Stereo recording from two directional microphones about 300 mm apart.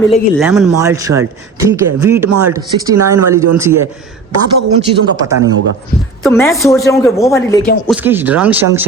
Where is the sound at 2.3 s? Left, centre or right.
Right.